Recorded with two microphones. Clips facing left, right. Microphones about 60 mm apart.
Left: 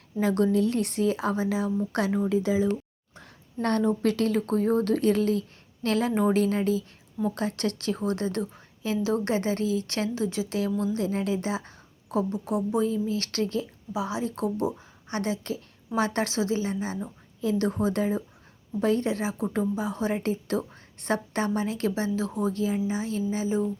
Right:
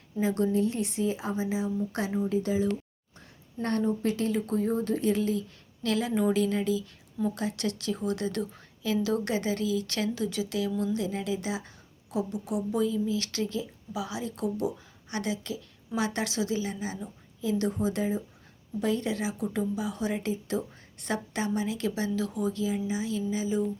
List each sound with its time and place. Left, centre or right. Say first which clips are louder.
0.2 s a woman's voice: left 3 dB; left
3.6 s a woman's voice: left 4 dB; left
10.9 s a woman's voice: left 3 dB; left
13.9 s a woman's voice: left 5 dB; left